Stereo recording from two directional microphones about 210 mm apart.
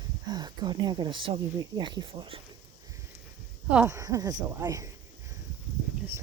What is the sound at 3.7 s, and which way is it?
Speech, 10° right (ahead or behind).